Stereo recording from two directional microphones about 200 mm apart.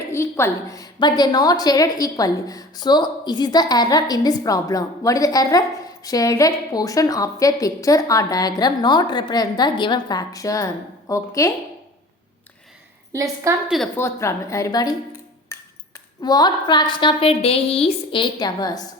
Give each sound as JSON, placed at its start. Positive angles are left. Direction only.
{"t": 0.1, "sound": "a woman's voice", "side_deg": 15}
{"t": 13.1, "sound": "a woman's voice", "side_deg": -15}
{"t": 13.7, "sound": "a woman's voice", "side_deg": 0}
{"t": 15.5, "sound": "ping", "side_deg": 15}
{"t": 16.2, "sound": "a woman's voice", "side_deg": 20}